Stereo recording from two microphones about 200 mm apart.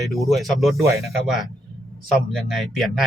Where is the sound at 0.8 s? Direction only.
15° right (ahead or behind).